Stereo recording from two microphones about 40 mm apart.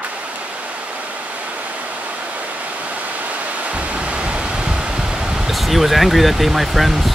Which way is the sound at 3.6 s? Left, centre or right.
Right.